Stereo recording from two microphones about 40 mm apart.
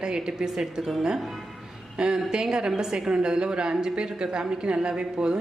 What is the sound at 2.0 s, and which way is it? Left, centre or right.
A woman's voice, right.